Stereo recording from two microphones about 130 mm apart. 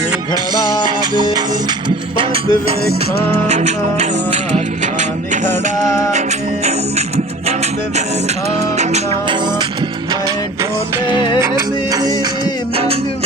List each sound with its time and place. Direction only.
0.6 s music: 35° left (ahead or behind)
0.9 s music: 35° right (ahead or behind)
3.4 s music: 60° right (ahead or behind)
5.5 s music: 20° left (ahead or behind)
11.3 s music: 25° right (ahead or behind)